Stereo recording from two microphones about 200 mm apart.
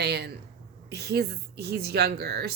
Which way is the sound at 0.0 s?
55° right (ahead or behind).